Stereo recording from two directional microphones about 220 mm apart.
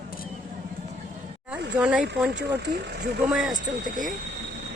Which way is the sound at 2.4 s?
50° right (ahead or behind).